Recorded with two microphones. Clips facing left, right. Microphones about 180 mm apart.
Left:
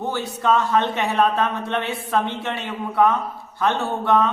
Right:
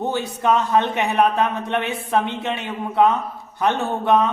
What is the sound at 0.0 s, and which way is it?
A man's voice, 20° right (ahead or behind).